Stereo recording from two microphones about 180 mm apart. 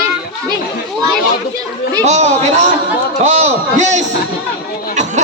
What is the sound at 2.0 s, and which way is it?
A man's voice, 40° right (ahead or behind).